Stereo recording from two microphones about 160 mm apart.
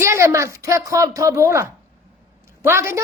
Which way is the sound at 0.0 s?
15° right (ahead or behind).